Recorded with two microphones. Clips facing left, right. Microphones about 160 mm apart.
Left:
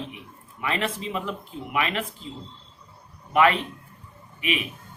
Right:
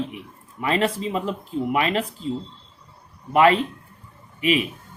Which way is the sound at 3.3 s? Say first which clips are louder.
Right 4 dB; 35° right (ahead or behind).